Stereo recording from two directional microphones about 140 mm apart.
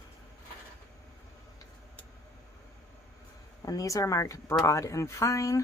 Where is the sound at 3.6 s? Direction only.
25° left (ahead or behind).